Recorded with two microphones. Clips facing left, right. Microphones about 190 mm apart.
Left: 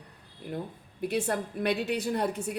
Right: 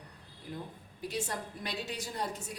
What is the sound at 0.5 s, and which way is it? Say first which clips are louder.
A woman's voice: left 6 dB; 55° left (ahead or behind).